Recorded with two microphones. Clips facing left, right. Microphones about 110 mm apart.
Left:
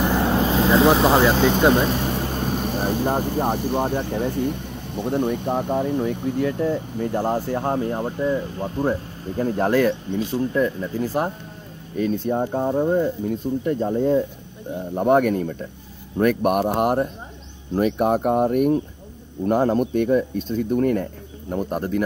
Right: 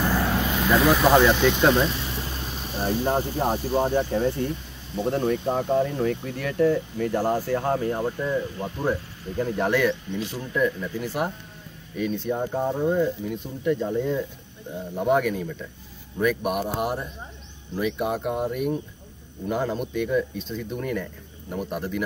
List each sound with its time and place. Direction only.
0.0 s vehicle: 20° left (ahead or behind)
0.3 s vehicle: 30° left (ahead or behind)
1.3 s speech: 45° left (ahead or behind)
1.7 s vehicle: 45° left (ahead or behind)
3.7 s speech: 15° left (ahead or behind)
4.3 s a sound: 60° left (ahead or behind)
5.1 s speech: 20° left (ahead or behind); by 14.2 s 35° left (ahead or behind)
15.0 s speech: 45° left (ahead or behind)